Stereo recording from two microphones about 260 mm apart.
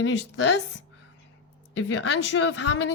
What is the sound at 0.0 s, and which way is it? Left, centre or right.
Speech, left.